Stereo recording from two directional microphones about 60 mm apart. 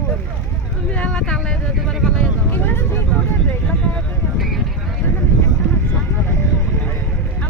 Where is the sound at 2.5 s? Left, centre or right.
Left.